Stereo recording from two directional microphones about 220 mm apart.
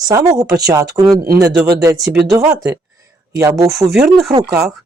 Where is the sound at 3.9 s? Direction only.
Centre (ahead or behind).